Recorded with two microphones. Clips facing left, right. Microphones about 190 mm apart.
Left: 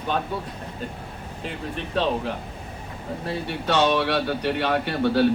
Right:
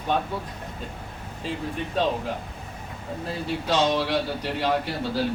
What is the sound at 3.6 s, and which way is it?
Speech, 65° left (ahead or behind).